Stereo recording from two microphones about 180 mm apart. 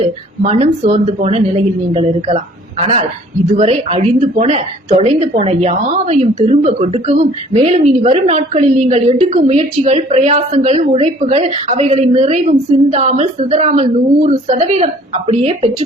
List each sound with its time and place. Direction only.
0.0 s speech: 35° right (ahead or behind)